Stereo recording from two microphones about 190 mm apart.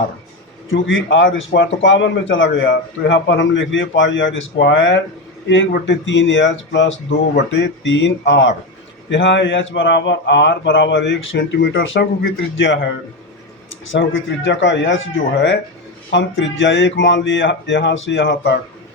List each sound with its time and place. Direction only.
0.7 s speech: 80° left
13.9 s speech: 85° left